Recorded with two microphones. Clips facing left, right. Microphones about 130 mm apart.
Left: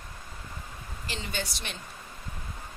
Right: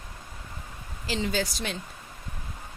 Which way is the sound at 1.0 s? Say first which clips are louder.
Right 8 dB; 90° right.